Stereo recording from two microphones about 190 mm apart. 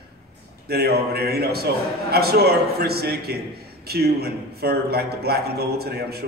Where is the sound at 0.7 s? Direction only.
55° right (ahead or behind).